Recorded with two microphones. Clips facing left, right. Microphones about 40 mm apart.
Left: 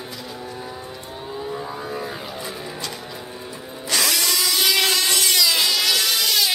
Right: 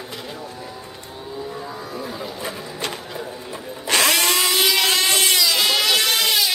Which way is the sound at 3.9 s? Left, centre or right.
Right.